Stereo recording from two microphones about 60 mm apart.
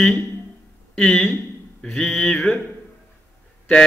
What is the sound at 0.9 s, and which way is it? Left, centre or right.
Speech, centre.